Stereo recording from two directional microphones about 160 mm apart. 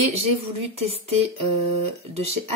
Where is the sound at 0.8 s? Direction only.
40° right (ahead or behind).